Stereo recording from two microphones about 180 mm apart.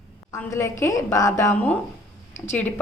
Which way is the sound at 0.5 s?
15° left (ahead or behind).